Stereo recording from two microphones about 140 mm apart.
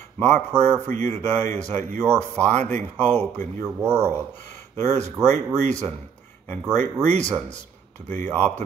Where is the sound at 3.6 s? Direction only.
25° right (ahead or behind).